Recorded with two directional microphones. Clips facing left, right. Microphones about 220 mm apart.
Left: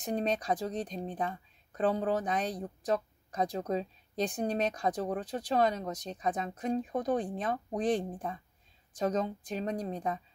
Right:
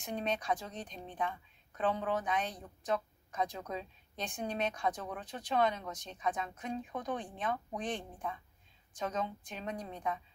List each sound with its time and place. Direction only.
0.0 s speech: 40° left (ahead or behind)